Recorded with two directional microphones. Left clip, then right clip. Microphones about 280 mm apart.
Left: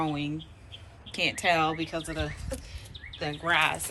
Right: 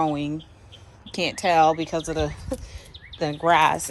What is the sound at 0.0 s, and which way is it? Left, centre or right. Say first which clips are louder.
A woman's voice: right 7 dB; centre.